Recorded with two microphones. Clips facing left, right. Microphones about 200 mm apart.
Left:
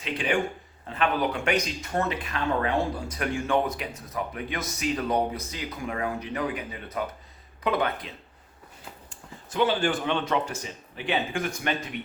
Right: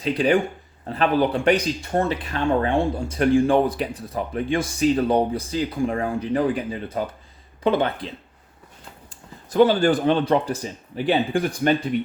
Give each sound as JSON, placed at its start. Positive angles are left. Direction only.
{"t": 0.0, "sound": "speech", "side_deg": -35}